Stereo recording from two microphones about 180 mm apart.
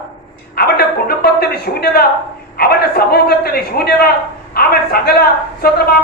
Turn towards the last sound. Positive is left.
turn(degrees=60)  # may be behind; listen again after turning